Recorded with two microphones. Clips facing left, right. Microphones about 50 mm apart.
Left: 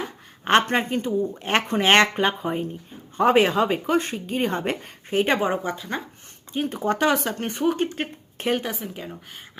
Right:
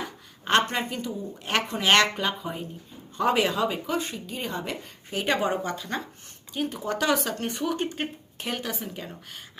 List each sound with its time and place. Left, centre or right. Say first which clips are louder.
0.4 s speech: left 4 dB; left
5.4 s speech: left 3 dB; left
5.7 s speech: left 2 dB; centre
6.5 s speech: left 5 dB; left
8.7 s speech: left 2 dB; centre